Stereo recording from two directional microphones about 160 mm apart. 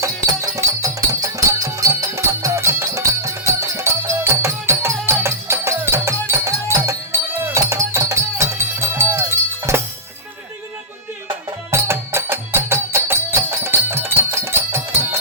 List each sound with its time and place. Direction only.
0.0 s music: 20° right (ahead or behind)
11.7 s music: 15° right (ahead or behind)